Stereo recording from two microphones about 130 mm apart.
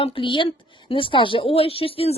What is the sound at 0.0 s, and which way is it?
A woman's voice, 45° left (ahead or behind).